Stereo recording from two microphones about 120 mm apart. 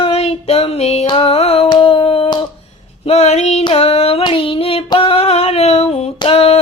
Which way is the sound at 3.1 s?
60° left (ahead or behind).